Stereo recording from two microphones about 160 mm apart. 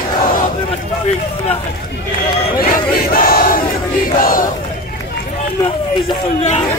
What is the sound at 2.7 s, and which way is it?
Battle cry, 65° left (ahead or behind).